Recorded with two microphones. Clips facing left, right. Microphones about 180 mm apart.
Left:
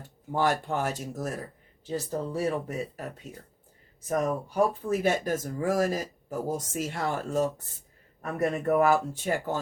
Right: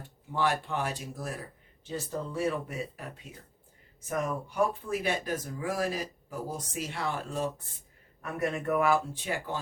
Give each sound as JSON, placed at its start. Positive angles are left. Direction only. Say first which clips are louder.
{"t": 0.3, "sound": "a man's voice", "louder": "left 3 dB", "side_deg": 45}
{"t": 4.1, "sound": "a man's voice", "louder": "left 5 dB", "side_deg": 40}